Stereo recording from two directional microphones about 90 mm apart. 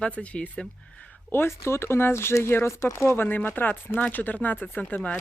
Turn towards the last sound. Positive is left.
turn(degrees=15)  # may be behind; listen again after turning